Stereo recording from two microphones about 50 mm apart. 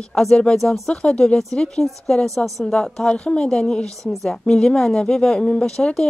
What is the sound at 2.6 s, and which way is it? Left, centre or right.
Speech, centre.